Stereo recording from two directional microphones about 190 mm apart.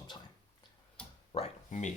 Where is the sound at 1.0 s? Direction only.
5° left (ahead or behind).